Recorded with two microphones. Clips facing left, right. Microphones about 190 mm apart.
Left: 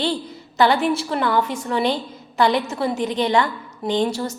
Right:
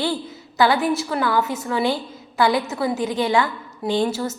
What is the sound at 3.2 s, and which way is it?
A woman's voice, 5° right (ahead or behind).